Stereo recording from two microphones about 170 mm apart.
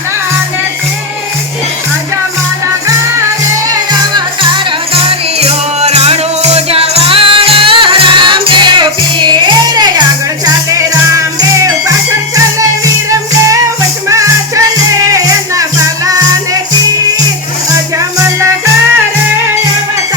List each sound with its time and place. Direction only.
4.1 s music: 30° right (ahead or behind)
5.4 s music: 40° right (ahead or behind); by 11.9 s 20° right (ahead or behind)
14.1 s music: 20° right (ahead or behind)